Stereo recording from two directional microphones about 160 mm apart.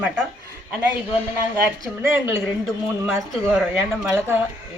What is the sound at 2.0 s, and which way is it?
Female singing, 15° right (ahead or behind).